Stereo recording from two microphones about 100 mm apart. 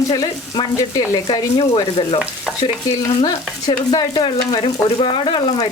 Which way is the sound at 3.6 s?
45° left (ahead or behind).